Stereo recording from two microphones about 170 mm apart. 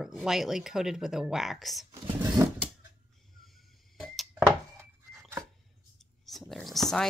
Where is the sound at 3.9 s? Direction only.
Centre (ahead or behind).